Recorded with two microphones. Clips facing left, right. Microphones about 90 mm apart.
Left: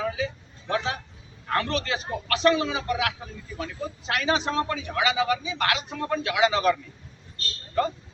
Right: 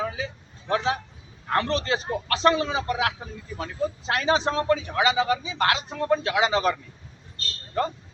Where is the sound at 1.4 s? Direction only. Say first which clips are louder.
Right 2 dB; 30° right (ahead or behind).